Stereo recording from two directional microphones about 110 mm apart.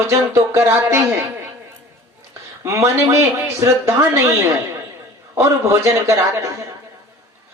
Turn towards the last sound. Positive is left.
turn(degrees=-25)  # may be behind; listen again after turning